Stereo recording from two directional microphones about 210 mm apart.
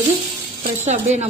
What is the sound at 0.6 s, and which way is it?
Speech, 35° right (ahead or behind).